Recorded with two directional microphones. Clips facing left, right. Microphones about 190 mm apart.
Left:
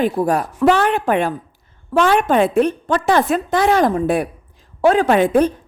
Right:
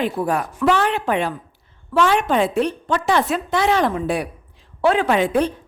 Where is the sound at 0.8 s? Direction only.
50° left (ahead or behind).